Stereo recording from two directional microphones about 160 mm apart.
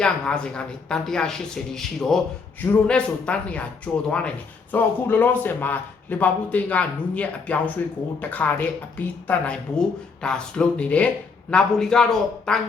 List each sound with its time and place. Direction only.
0.0 s speech: 5° left (ahead or behind)
4.7 s speech: 10° left (ahead or behind)